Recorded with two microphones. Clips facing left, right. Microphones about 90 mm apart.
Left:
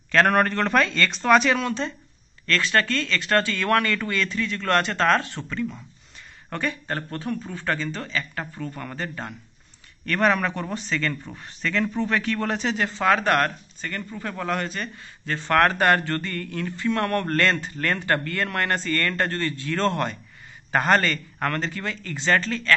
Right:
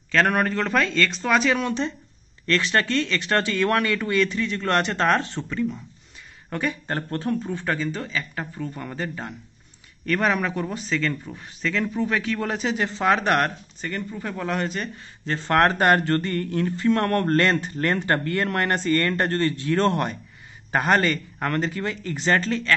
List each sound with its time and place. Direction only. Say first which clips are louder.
0.1 s a man's voice: left 2 dB; centre (ahead or behind)
1.6 s speech: right 1 dB; 20° right (ahead or behind)
6.7 s speech: right 2 dB; 25° right (ahead or behind)
7.7 s a man's voice: left 1 dB; 10° right (ahead or behind)
12.7 s speech: even; 20° right (ahead or behind)
17.4 s speech: right 2 dB; 20° right (ahead or behind)